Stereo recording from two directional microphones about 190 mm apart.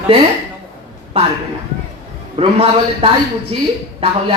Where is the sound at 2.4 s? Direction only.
30° right (ahead or behind).